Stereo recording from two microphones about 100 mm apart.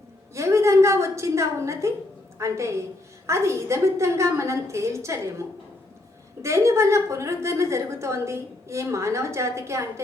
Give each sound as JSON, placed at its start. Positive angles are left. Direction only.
{"t": 0.3, "sound": "a sound", "side_deg": -30}
{"t": 2.4, "sound": "a woman's voice", "side_deg": -30}
{"t": 6.4, "sound": "a woman's voice", "side_deg": -30}